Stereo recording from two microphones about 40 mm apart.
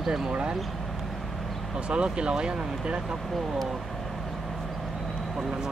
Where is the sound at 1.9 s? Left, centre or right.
Right.